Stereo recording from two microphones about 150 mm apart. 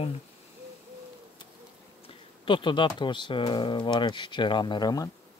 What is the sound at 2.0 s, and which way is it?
Speech, 35° left (ahead or behind).